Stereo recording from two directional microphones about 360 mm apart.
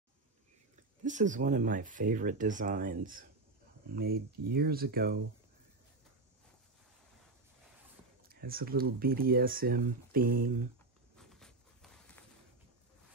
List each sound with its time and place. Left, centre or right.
1.0 s speech: right
8.3 s speech: right
11.1 s a sound: centre